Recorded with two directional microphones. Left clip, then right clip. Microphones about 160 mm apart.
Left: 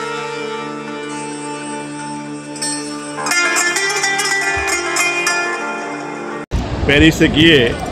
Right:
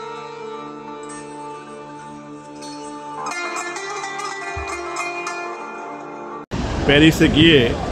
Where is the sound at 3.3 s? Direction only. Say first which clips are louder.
Left 12 dB; 55° left (ahead or behind).